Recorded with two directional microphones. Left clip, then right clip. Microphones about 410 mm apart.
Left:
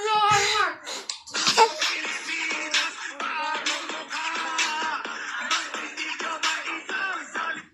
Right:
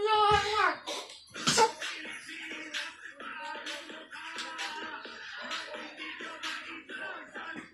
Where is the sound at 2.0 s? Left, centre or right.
Left.